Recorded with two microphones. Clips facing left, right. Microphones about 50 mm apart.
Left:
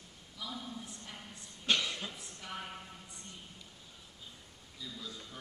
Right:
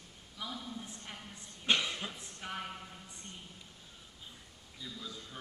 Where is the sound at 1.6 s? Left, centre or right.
Centre.